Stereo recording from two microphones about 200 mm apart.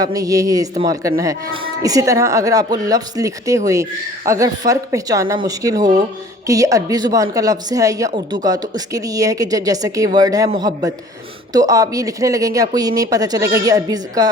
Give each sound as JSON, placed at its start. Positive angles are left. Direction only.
{"t": 0.0, "sound": "a man's voice", "side_deg": -15}